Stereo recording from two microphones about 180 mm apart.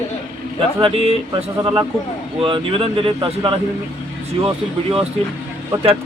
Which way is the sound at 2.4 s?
30° right (ahead or behind).